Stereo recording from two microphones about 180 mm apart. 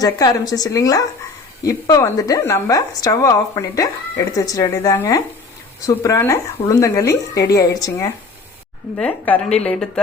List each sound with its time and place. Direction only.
0.0 s a woman's voice: 20° left (ahead or behind)
9.0 s a woman's voice: 10° left (ahead or behind)